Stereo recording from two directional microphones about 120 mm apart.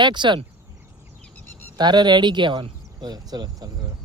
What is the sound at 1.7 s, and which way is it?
Speech, 35° right (ahead or behind).